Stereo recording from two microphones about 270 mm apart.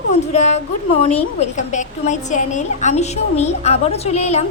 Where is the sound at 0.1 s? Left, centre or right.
Left.